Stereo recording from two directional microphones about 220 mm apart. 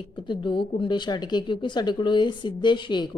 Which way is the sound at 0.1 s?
20° left (ahead or behind).